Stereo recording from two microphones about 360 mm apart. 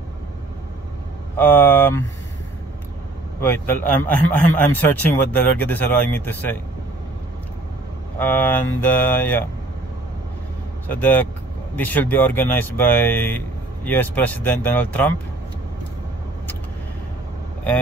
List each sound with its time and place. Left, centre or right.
1.3 s a man's voice: centre
3.3 s a man's voice: centre
8.2 s a man's voice: centre
10.9 s a man's voice: centre